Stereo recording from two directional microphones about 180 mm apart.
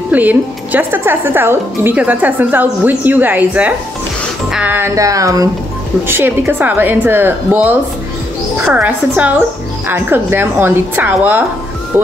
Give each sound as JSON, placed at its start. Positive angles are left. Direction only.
{"t": 0.1, "sound": "speech", "side_deg": -10}